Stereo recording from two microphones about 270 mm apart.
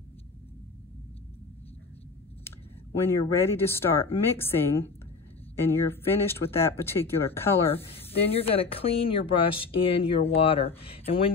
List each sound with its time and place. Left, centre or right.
3.0 s speech: centre
7.7 s speech: left